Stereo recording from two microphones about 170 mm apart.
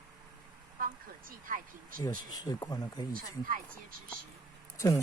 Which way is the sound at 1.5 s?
55° right (ahead or behind).